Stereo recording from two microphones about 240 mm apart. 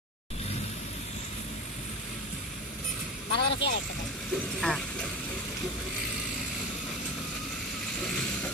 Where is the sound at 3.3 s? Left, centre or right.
Left.